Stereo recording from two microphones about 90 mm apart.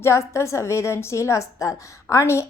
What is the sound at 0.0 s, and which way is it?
A woman's voice, 30° left (ahead or behind).